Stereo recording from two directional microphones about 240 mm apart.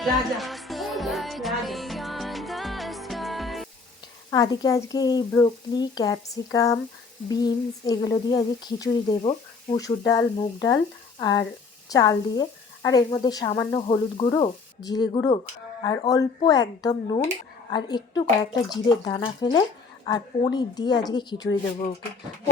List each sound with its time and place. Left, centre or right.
0.0 s music: centre
4.3 s a woman's voice: centre